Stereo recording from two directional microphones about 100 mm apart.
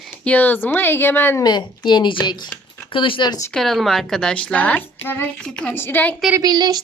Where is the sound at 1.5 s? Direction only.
50° left (ahead or behind).